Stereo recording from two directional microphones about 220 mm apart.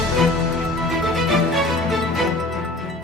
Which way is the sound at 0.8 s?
Centre (ahead or behind).